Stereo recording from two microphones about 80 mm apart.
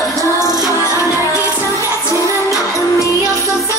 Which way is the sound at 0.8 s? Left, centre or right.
Left.